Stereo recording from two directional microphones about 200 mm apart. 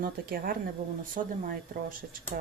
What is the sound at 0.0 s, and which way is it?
Speech, 45° right (ahead or behind).